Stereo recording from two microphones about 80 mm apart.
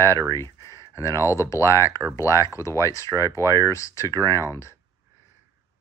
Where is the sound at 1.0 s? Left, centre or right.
Left.